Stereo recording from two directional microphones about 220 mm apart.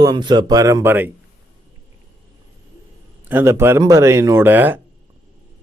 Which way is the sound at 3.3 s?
10° right (ahead or behind).